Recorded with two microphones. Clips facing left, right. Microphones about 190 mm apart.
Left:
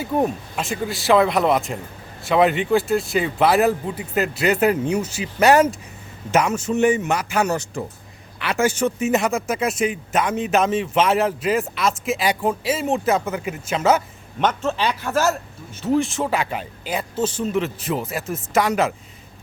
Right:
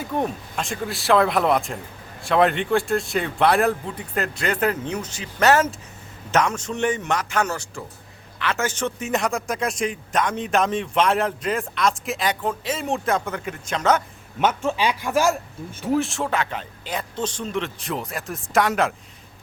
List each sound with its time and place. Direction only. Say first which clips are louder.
0.2 s speech: left 3 dB; 5° left (ahead or behind)
7.5 s speech: left 6 dB; 20° left (ahead or behind)
14.3 s a man's voice: even; 10° right (ahead or behind)